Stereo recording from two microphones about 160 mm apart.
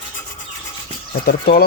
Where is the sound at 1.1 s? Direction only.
70° left (ahead or behind).